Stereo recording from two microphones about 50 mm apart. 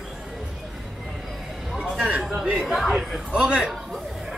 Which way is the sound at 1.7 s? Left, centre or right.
Centre.